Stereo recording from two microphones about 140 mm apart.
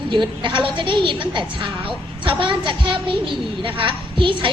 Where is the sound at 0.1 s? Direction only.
35° right (ahead or behind).